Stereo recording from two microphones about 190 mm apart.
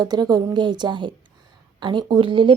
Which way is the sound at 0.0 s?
20° right (ahead or behind).